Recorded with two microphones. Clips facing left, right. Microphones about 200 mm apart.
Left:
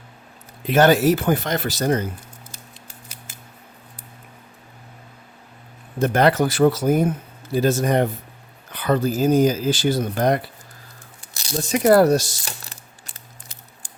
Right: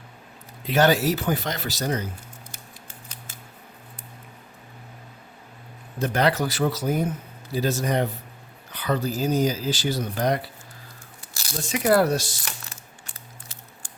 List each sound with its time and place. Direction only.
0.7 s speech: 50° left (ahead or behind)
6.0 s speech: 50° left (ahead or behind)
11.6 s speech: 45° left (ahead or behind)